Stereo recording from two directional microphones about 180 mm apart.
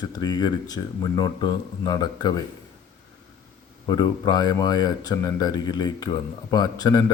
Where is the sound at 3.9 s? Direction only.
20° left (ahead or behind).